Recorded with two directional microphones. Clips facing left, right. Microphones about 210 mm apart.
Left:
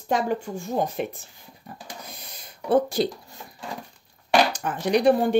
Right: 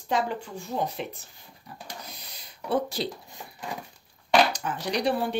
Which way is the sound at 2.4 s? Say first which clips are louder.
Left 6 dB; 50° left (ahead or behind).